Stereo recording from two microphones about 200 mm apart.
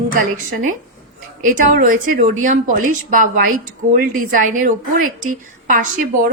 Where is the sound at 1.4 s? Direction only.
40° right (ahead or behind).